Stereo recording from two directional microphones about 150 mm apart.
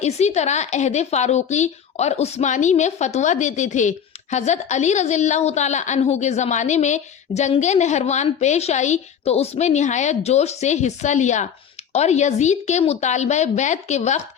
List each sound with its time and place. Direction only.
0.0 s a woman's voice: 50° left (ahead or behind)